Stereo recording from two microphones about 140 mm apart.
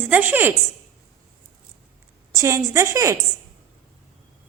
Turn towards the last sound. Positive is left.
turn(degrees=-20)  # may be behind; listen again after turning